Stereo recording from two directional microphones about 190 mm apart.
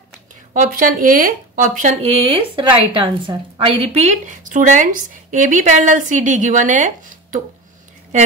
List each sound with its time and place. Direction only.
0.5 s speech: 45° right (ahead or behind)